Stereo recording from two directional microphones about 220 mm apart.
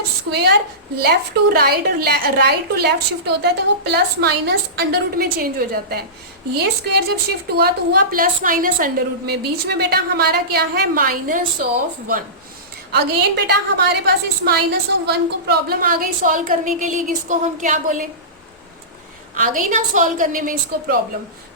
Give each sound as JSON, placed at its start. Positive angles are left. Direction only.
{"t": 0.3, "sound": "a woman's voice", "side_deg": -50}
{"t": 12.9, "sound": "a woman's voice", "side_deg": -50}
{"t": 19.3, "sound": "a woman's voice", "side_deg": -35}